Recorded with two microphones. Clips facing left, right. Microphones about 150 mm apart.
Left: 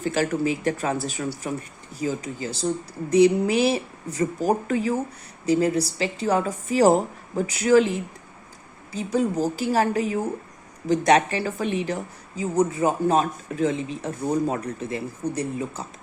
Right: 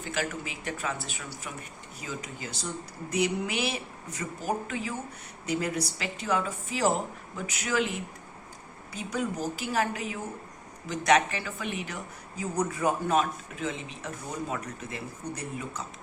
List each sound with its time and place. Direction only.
0.0 s speech: 40° left (ahead or behind)